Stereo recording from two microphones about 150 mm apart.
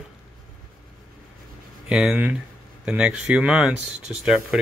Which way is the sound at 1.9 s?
5° right (ahead or behind).